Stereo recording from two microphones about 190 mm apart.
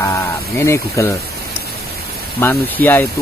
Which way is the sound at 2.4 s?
10° left (ahead or behind).